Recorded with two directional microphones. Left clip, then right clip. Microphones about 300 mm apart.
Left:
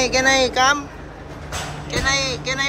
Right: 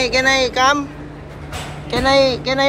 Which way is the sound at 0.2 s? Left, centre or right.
Centre.